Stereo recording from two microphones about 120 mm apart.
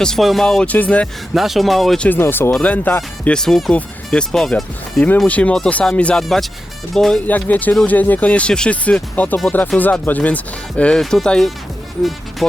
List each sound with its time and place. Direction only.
0.0 s speech: centre (ahead or behind)
1.3 s speech: centre (ahead or behind)
2.0 s speech: 20° left (ahead or behind); by 7.2 s centre (ahead or behind)
7.3 s speech: 15° left (ahead or behind)
12.4 s music: centre (ahead or behind)